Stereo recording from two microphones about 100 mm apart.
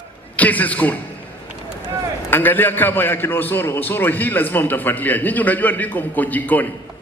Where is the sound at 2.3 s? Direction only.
20° left (ahead or behind).